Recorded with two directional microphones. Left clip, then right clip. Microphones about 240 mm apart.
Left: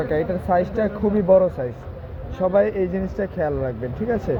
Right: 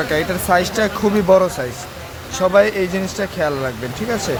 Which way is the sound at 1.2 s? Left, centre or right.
Right.